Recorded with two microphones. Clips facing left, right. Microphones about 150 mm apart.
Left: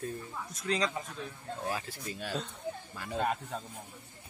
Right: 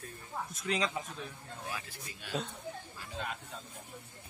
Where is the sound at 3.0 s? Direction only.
50° left (ahead or behind).